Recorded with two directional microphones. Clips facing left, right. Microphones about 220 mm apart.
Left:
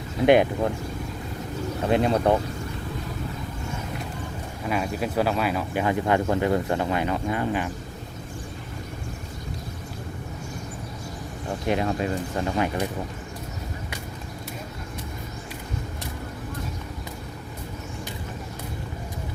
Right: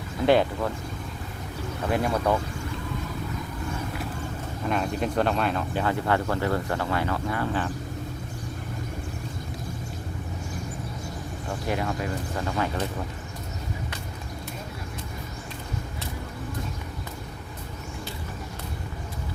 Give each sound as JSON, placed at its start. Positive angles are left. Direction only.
{"t": 0.3, "sound": "speech", "side_deg": 20}
{"t": 1.9, "sound": "speech", "side_deg": 25}
{"t": 4.6, "sound": "speech", "side_deg": 5}
{"t": 11.6, "sound": "speech", "side_deg": 20}